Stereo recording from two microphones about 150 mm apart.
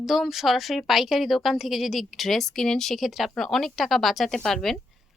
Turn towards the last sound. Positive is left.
turn(degrees=0)  # may be behind; listen again after turning